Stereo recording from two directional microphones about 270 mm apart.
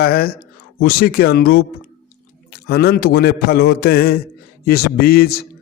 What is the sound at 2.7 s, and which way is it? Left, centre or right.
A man's voice, left.